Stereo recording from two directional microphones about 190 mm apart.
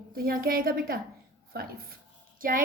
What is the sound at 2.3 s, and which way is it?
Speech, 45° right (ahead or behind).